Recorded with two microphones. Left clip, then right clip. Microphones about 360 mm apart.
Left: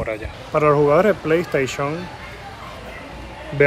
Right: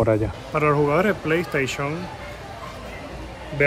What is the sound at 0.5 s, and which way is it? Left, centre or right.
Speech, centre.